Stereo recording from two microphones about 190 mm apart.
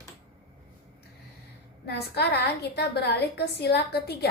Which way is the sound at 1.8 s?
60° left (ahead or behind).